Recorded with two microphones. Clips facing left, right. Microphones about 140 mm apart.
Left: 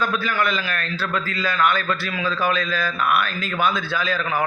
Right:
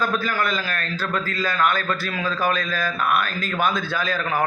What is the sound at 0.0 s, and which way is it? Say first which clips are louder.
A man's voice: left 1 dB; 40° right (ahead or behind).